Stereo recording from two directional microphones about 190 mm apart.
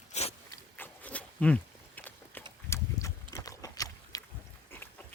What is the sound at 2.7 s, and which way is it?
Horse, 15° left (ahead or behind).